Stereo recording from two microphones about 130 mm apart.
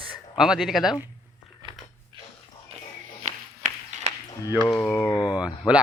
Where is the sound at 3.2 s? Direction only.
65° right (ahead or behind).